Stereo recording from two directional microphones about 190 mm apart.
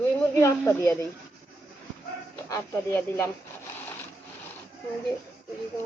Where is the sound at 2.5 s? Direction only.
15° left (ahead or behind).